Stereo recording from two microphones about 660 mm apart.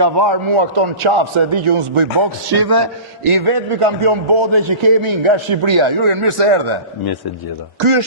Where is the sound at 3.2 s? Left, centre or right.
Right.